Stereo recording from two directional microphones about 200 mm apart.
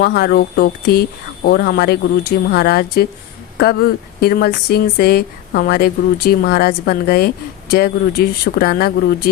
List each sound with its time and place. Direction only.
0.0 s speech: 50° left (ahead or behind)